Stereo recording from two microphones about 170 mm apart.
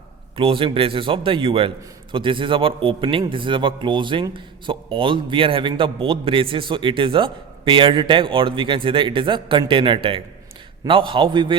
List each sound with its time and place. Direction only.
0.3 s a man's voice: 30° right (ahead or behind)